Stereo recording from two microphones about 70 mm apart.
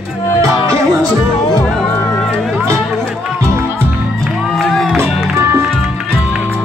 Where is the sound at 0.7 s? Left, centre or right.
Right.